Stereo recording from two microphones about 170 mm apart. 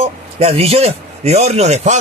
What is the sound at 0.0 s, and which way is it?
A man's voice, 35° right (ahead or behind).